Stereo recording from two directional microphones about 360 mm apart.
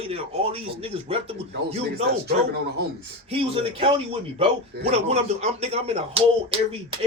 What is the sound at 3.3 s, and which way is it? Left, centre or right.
A man's voice, centre.